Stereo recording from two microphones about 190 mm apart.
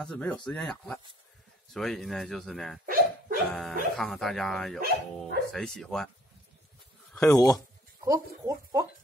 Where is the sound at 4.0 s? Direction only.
Centre (ahead or behind).